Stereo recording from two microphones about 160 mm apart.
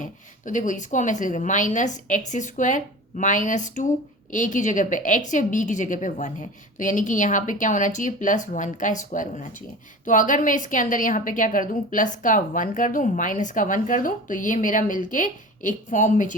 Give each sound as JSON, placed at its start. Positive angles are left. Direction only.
{"t": 0.0, "sound": "a woman's voice", "side_deg": 55}